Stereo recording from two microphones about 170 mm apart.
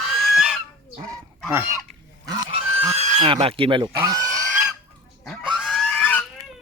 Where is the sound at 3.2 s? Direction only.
30° right (ahead or behind).